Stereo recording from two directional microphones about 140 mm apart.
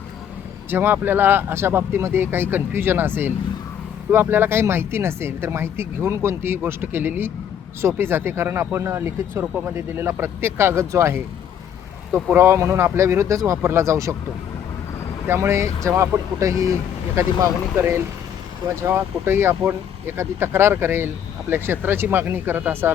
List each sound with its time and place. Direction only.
0.7 s speech: 15° right (ahead or behind)
15.3 s speech: 20° right (ahead or behind)